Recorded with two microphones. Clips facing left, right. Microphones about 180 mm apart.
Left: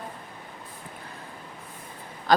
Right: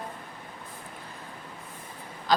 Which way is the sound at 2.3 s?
55° left (ahead or behind).